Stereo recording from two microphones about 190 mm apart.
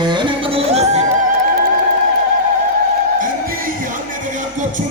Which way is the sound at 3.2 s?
50° right (ahead or behind).